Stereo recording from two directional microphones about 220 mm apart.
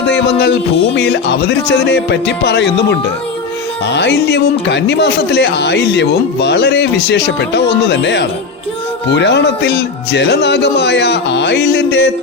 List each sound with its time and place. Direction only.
0.1 s music: 50° left (ahead or behind)
0.9 s speech: 50° left (ahead or behind)